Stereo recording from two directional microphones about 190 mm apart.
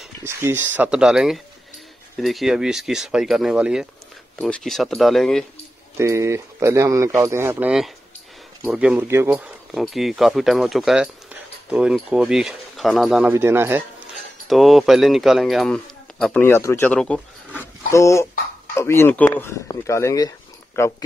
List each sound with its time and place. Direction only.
0.2 s speech: 15° right (ahead or behind)
5.9 s speech: 15° right (ahead or behind)
13.3 s speech: 10° right (ahead or behind)
14.5 s speech: centre (ahead or behind); by 20.9 s 15° left (ahead or behind)